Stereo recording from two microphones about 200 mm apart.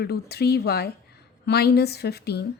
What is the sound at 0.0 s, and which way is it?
Speech, 55° left (ahead or behind).